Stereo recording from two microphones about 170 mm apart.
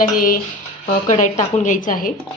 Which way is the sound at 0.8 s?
45° left (ahead or behind).